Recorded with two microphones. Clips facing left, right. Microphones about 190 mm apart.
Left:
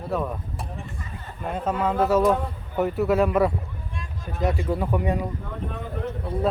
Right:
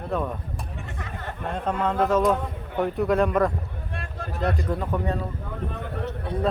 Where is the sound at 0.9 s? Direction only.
75° right (ahead or behind).